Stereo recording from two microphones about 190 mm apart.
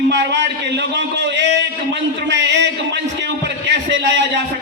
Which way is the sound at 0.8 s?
65° right (ahead or behind).